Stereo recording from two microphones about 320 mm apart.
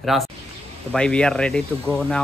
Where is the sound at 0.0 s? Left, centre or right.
Centre.